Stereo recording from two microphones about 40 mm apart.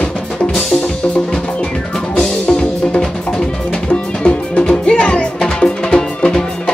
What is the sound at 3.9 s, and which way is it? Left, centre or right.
Music, left.